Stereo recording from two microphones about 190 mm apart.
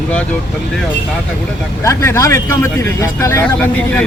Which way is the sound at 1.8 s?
15° left (ahead or behind).